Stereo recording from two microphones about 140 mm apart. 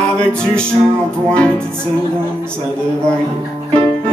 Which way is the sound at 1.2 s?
5° left (ahead or behind).